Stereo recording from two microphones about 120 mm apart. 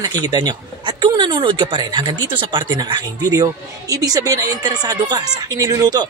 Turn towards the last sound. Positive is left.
turn(degrees=-30)  # may be behind; listen again after turning